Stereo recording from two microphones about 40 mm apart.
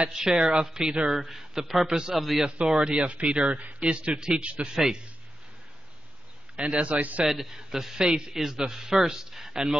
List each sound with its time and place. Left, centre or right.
0.1 s a man's voice: centre
2.6 s speech: right
6.5 s a man's voice: right
7.2 s a man's voice: centre